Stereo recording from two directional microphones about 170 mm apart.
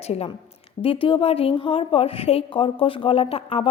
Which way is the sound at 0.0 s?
35° left (ahead or behind).